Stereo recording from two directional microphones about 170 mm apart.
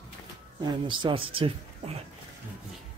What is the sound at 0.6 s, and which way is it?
Speech, 30° right (ahead or behind).